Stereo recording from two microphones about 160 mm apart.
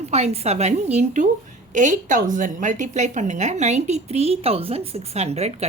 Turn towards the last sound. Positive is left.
turn(degrees=-40)  # may be behind; listen again after turning